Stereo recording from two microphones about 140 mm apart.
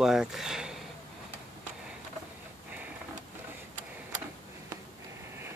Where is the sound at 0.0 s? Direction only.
5° right (ahead or behind).